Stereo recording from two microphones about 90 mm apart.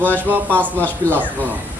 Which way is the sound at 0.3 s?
20° right (ahead or behind).